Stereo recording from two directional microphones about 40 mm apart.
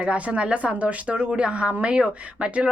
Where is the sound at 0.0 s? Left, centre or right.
Right.